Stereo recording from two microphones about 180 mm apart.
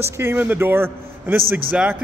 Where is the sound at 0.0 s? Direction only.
15° right (ahead or behind).